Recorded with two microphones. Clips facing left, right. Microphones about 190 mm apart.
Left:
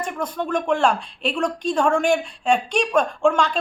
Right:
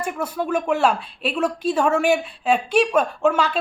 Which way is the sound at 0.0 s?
10° right (ahead or behind).